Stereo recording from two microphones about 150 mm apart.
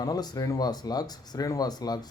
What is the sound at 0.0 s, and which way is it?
A man's voice, 25° left (ahead or behind).